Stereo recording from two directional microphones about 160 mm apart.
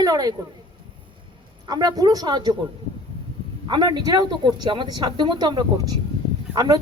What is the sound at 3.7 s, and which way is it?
A woman's voice, 25° right (ahead or behind).